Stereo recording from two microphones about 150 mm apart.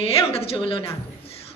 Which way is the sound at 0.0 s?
40° left (ahead or behind).